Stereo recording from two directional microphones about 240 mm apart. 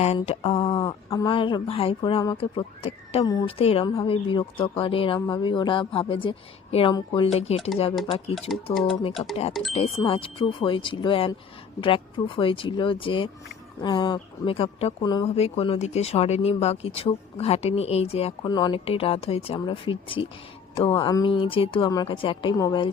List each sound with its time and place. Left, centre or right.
0.0 s speech: left
8.5 s speech: centre
9.7 s speech: left